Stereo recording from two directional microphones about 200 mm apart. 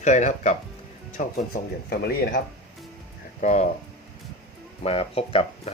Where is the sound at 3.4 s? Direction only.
35° left (ahead or behind).